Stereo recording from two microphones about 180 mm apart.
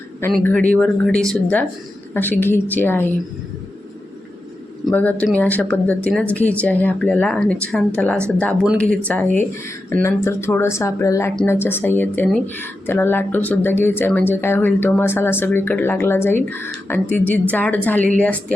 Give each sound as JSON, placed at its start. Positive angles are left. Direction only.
{"t": 0.3, "sound": "a woman's voice", "side_deg": 5}
{"t": 4.9, "sound": "a woman's voice", "side_deg": 10}